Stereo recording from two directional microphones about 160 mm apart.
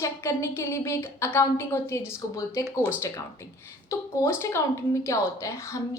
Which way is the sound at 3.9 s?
15° left (ahead or behind).